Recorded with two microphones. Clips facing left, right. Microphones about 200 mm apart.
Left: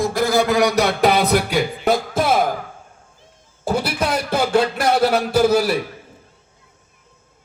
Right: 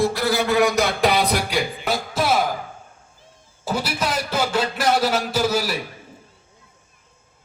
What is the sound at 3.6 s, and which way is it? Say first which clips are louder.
Music: left 4 dB; 55° left (ahead or behind).